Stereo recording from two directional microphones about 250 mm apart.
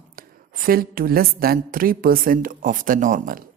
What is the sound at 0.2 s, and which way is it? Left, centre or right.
A woman's voice, right.